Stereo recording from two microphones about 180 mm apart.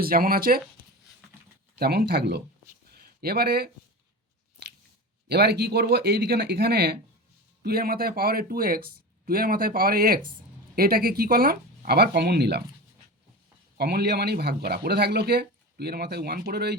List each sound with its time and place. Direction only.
0.0 s speech: 55° right (ahead or behind)
1.8 s speech: 60° right (ahead or behind)
2.9 s a sound: 55° right (ahead or behind)
5.3 s speech: 65° right (ahead or behind)
13.7 s speech: 60° right (ahead or behind)